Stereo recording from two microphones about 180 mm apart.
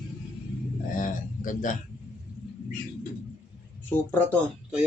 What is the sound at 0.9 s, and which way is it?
Speech, 45° left (ahead or behind).